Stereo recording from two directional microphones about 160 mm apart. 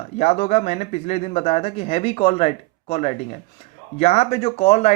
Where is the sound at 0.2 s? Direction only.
40° left (ahead or behind).